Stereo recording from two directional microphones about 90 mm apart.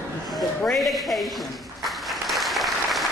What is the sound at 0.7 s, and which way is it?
Applause, centre (ahead or behind).